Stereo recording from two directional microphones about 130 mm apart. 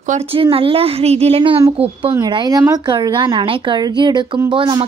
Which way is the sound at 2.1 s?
30° right (ahead or behind).